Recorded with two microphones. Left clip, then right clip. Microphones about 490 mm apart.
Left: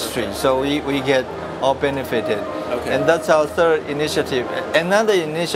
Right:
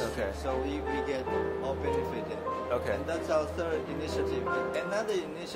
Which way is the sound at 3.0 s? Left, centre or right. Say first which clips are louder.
Left 18 dB; left.